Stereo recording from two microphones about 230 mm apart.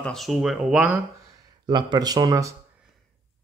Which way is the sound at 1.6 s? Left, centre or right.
Centre.